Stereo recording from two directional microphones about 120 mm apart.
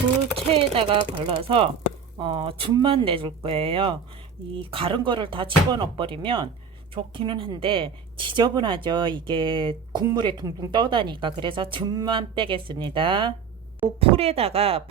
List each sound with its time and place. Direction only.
0.5 s speech: 50° right (ahead or behind)